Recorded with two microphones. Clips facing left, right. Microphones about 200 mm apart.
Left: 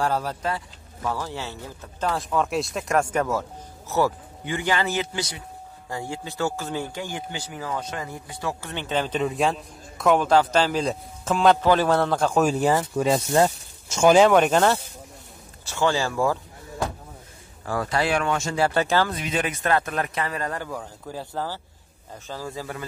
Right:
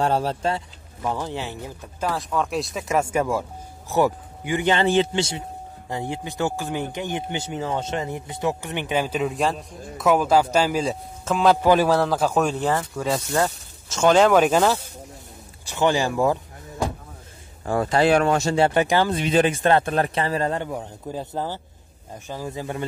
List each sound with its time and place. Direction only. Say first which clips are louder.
0.0 s a man's voice: right 3 dB; 25° right (ahead or behind)
2.0 s a man's voice: even; centre (ahead or behind)
11.6 s speech: right 2 dB; 15° right (ahead or behind)
12.4 s speech: left 2 dB; 10° left (ahead or behind)
12.9 s speech: left 3 dB; 20° left (ahead or behind); by 14.8 s 5° right (ahead or behind)
15.6 s speech: right 2 dB; 15° right (ahead or behind)
17.6 s a man's voice: right 5 dB; 25° right (ahead or behind)
18.1 s speech: right 5 dB; 35° right (ahead or behind)
18.7 s speech: right 2 dB; 15° right (ahead or behind)
19.1 s a man's voice: right 8 dB; 30° right (ahead or behind)